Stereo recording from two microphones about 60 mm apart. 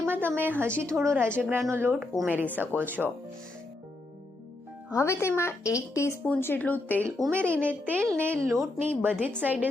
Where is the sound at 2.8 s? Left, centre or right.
Right.